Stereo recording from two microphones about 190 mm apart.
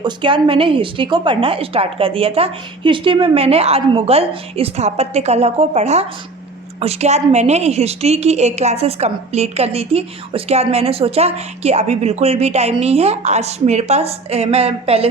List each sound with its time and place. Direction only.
0.0 s a woman's voice: 25° right (ahead or behind)